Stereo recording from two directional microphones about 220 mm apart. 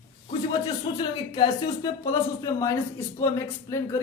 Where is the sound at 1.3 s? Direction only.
20° left (ahead or behind).